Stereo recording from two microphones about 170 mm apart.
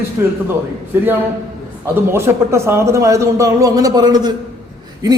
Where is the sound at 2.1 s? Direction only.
15° right (ahead or behind).